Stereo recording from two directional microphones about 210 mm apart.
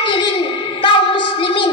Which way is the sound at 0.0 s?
20° left (ahead or behind).